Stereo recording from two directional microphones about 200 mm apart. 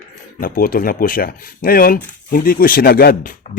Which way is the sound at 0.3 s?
45° left (ahead or behind).